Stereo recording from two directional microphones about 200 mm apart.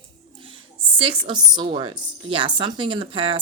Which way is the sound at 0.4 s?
25° right (ahead or behind).